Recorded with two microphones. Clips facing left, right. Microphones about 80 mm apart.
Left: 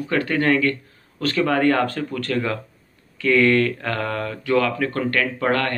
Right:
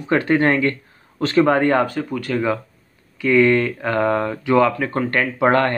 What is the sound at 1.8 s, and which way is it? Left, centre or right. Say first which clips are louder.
Speech: right 2 dB; centre.